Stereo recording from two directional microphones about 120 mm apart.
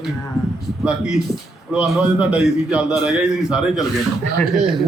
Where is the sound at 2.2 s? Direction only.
5° right (ahead or behind).